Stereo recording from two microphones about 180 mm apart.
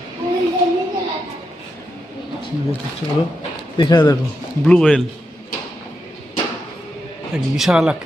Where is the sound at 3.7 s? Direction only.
25° left (ahead or behind).